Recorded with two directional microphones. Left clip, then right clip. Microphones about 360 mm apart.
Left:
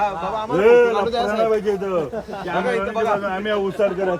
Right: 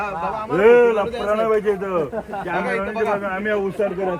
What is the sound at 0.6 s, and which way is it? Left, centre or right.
Speech, centre.